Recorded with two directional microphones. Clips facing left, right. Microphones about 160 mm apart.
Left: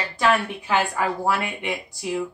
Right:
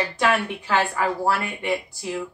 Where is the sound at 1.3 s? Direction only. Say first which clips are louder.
Right 1 dB; 15° left (ahead or behind).